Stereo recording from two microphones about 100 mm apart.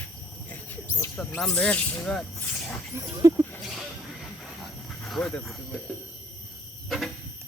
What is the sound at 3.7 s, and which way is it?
Snake, centre (ahead or behind).